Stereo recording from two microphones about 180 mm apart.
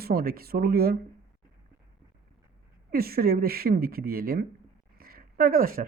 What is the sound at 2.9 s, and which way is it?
A woman's voice, 55° right (ahead or behind).